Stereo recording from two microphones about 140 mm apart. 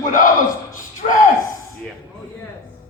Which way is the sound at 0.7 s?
70° left (ahead or behind).